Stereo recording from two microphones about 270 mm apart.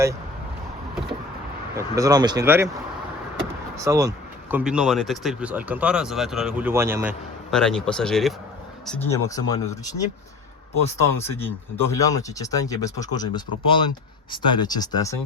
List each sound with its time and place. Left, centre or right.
1.7 s speech: centre
3.8 s speech: centre
7.5 s speech: centre
11.2 s speech: centre